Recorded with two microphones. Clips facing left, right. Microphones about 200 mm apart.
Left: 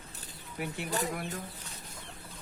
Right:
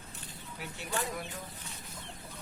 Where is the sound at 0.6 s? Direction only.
55° left (ahead or behind).